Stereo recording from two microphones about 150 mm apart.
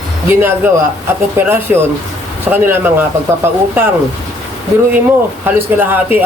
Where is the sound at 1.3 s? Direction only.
15° right (ahead or behind).